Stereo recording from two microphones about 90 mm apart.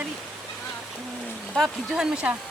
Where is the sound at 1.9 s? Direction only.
5° right (ahead or behind).